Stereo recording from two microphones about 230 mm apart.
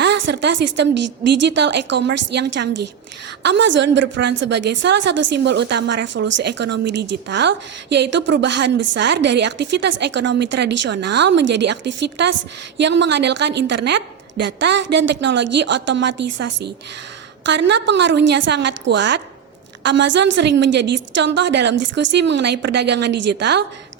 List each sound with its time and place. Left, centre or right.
0.0 s speech: right